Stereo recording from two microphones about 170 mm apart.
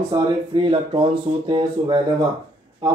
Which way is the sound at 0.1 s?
30° right (ahead or behind).